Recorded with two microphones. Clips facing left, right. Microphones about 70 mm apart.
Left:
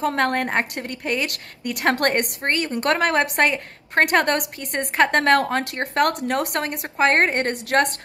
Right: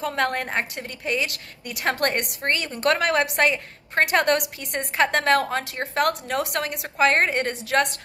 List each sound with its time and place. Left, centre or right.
0.0 s a woman's voice: left